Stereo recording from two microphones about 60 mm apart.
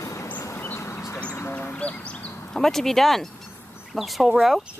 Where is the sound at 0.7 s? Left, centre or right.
Left.